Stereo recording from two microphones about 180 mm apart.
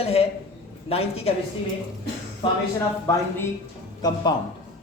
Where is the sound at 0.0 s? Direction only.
35° left (ahead or behind).